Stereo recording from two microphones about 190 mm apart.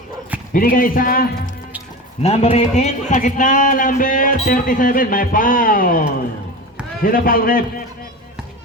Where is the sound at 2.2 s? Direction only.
35° left (ahead or behind); by 7.8 s 50° left (ahead or behind).